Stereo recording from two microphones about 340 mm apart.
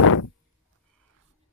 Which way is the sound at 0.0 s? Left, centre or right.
Left.